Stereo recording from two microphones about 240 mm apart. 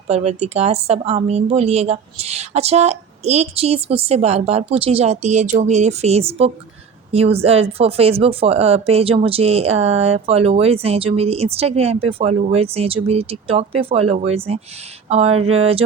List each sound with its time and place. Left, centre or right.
0.1 s speech: right